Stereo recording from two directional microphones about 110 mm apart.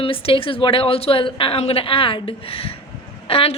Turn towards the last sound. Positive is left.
turn(degrees=60)  # may be behind; listen again after turning